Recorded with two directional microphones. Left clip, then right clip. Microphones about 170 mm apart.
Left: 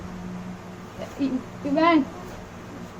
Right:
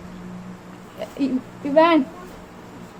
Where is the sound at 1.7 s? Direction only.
70° right (ahead or behind).